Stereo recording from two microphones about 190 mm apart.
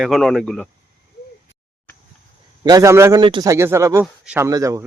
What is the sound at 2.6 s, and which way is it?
A man's voice, 20° right (ahead or behind).